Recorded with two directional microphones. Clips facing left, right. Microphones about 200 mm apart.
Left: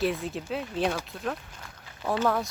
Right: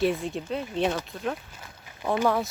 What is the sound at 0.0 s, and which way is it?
Speech, centre (ahead or behind).